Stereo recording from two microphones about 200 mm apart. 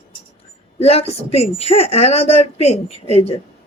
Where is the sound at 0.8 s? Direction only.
30° left (ahead or behind).